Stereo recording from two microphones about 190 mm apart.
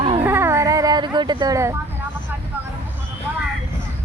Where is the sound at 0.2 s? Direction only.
10° right (ahead or behind).